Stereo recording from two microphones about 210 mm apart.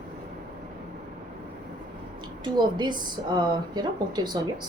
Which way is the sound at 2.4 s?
20° right (ahead or behind).